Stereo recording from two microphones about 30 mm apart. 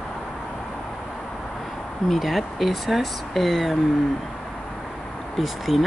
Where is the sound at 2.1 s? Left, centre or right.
Centre.